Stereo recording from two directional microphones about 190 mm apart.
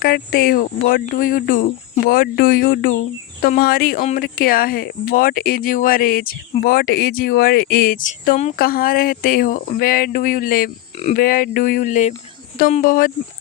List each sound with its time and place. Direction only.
0.0 s speech: 50° left (ahead or behind)